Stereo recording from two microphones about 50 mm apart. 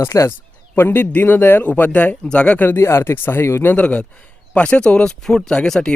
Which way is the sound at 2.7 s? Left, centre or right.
Left.